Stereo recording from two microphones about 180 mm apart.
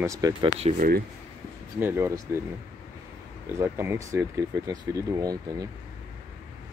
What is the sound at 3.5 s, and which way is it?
Speech, 15° right (ahead or behind).